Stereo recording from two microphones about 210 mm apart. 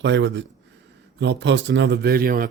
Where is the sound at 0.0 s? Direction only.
60° right (ahead or behind).